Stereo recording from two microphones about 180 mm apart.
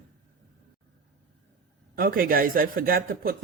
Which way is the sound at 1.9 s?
50° right (ahead or behind).